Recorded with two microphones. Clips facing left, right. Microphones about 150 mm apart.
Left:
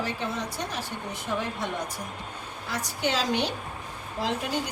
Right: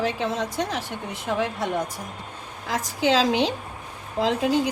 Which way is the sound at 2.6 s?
90° right.